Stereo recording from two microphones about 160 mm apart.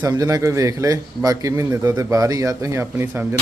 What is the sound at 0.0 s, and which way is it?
Speech, 25° right (ahead or behind).